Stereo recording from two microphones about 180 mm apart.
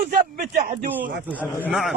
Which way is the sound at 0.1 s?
50° right (ahead or behind).